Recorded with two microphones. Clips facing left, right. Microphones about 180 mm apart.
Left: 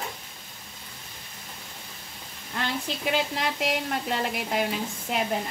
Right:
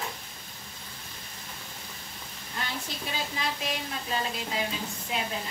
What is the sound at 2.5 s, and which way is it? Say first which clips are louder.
A woman's voice: left 6 dB; 75° left (ahead or behind).